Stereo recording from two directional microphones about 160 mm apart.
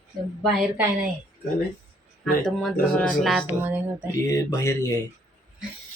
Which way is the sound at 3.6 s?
15° right (ahead or behind).